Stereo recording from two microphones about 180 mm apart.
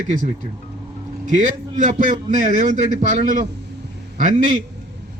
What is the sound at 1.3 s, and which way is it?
A man's voice, 45° right (ahead or behind).